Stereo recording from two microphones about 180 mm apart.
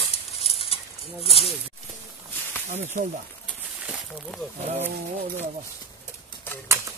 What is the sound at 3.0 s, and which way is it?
Speech, 45° right (ahead or behind).